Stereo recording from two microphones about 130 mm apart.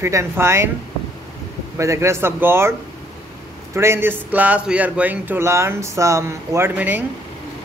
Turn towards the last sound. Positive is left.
turn(degrees=-15)  # may be behind; listen again after turning